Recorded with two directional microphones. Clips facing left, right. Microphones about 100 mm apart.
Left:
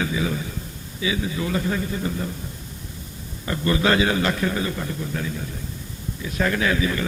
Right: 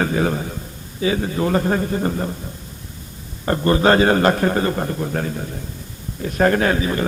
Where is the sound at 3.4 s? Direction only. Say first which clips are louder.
Right 6 dB; 45° right (ahead or behind).